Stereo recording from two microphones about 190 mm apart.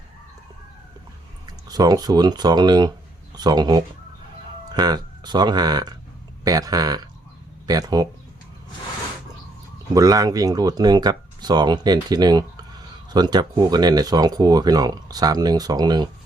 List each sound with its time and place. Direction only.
1.6 s speech: 20° right (ahead or behind)
9.9 s speech: 20° right (ahead or behind)